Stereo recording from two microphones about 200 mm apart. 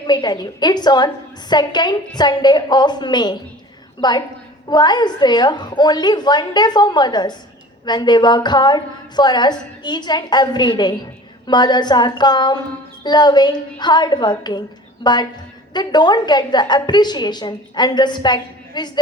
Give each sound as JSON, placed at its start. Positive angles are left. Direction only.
{"t": 0.1, "sound": "a woman's voice", "side_deg": 20}
{"t": 4.7, "sound": "a woman's voice", "side_deg": 20}